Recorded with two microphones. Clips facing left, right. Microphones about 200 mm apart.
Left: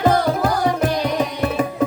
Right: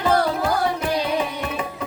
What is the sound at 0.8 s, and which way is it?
Music, 45° left (ahead or behind).